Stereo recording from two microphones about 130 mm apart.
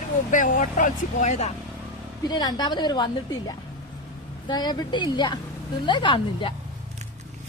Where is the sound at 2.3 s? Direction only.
30° left (ahead or behind).